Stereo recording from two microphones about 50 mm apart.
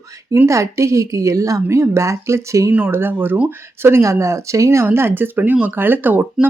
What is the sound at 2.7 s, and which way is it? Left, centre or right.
Speech, right.